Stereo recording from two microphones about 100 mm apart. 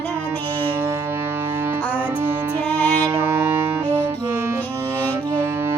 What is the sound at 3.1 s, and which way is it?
Music, 25° right (ahead or behind).